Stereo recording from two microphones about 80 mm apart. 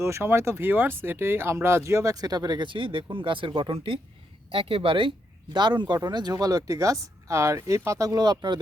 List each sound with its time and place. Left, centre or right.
0.0 s speech: right
5.5 s speech: right
6.3 s speech: right